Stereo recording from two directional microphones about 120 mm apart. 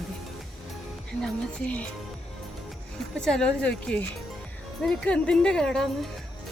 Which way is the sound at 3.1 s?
5° left (ahead or behind).